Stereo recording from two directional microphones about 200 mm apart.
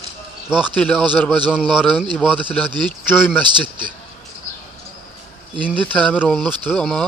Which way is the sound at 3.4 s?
25° right (ahead or behind).